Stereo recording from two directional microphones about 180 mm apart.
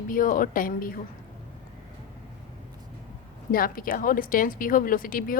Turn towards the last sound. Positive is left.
turn(degrees=50)  # may be behind; listen again after turning